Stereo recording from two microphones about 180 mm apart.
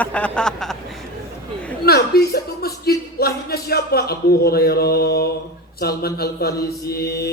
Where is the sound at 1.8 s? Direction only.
60° left (ahead or behind).